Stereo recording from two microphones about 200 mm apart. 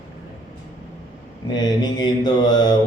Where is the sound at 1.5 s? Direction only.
20° left (ahead or behind).